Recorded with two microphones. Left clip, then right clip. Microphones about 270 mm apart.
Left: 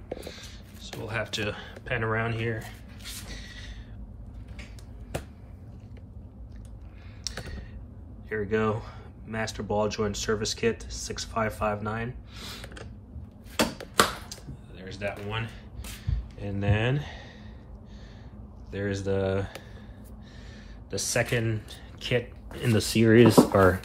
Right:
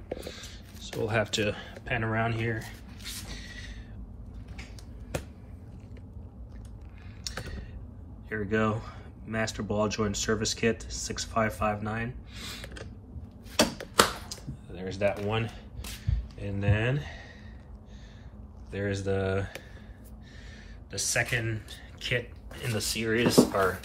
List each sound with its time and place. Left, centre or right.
0.1 s a sound: centre
7.2 s computer keyboard: centre
8.3 s speech: centre
14.3 s a sound: centre
16.1 s speech: centre
18.7 s speech: centre
20.9 s speech: centre
22.8 s speech: left